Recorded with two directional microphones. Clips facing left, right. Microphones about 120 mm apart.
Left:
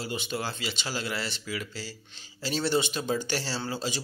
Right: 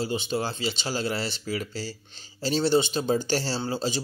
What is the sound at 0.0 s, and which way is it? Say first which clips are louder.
Speech: right 5 dB; 30° right (ahead or behind).